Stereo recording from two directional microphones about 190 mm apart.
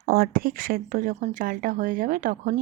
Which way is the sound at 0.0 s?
55° right (ahead or behind).